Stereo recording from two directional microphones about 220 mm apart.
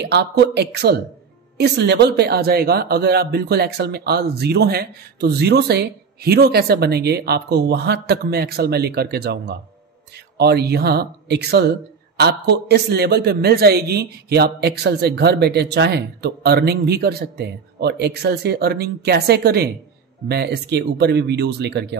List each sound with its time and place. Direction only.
0.0 s speech: 50° right (ahead or behind)